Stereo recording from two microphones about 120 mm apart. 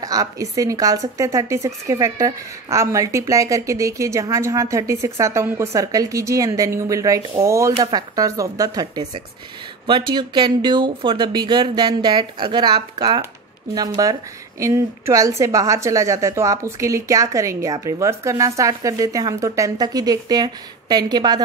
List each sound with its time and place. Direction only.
0.0 s a woman's voice: 30° right (ahead or behind)